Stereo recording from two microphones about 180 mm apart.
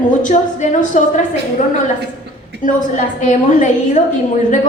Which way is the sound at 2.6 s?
45° left (ahead or behind).